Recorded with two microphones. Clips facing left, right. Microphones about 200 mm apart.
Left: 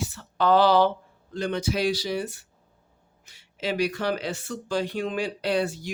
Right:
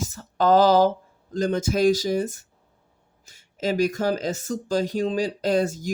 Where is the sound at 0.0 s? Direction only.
45° right (ahead or behind).